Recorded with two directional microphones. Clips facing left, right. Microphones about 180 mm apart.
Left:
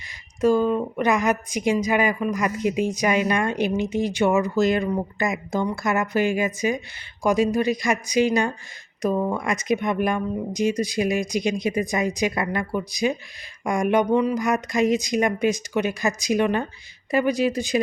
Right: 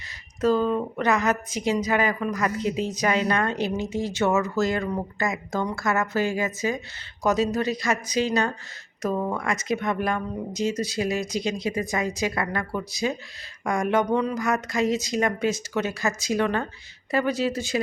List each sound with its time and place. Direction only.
0.4 s a woman's voice: 10° left (ahead or behind)